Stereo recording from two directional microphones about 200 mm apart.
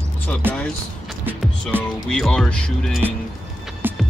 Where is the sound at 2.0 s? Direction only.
Centre (ahead or behind).